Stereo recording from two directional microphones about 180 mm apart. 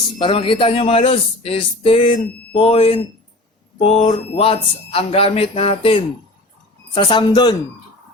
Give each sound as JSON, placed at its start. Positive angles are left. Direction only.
{"t": 0.2, "sound": "a man's voice", "side_deg": 30}